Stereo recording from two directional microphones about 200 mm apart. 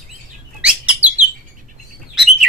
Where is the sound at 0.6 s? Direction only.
5° right (ahead or behind).